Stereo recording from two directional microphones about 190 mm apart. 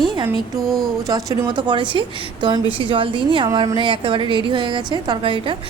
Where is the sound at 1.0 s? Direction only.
20° right (ahead or behind).